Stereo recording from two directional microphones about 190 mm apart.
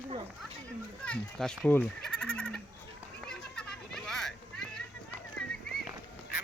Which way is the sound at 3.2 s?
5° left (ahead or behind).